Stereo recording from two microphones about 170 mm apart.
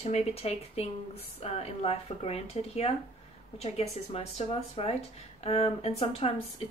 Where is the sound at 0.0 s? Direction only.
40° left (ahead or behind).